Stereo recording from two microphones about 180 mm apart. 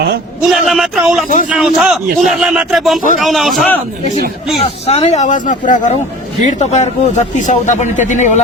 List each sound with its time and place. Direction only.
0.4 s speech: centre (ahead or behind)
4.6 s a man's voice: 35° left (ahead or behind)